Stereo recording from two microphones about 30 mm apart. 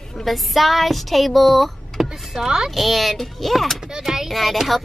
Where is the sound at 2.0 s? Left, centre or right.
Centre.